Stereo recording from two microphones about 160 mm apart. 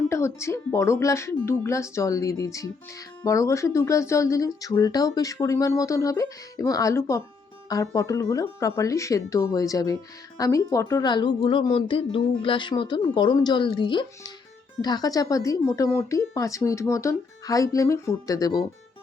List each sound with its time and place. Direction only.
0.1 s speech: 15° left (ahead or behind)